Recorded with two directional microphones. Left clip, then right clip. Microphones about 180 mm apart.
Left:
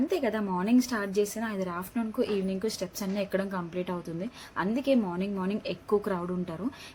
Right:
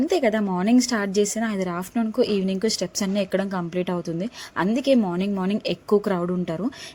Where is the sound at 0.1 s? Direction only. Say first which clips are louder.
Right 7 dB; 50° right (ahead or behind).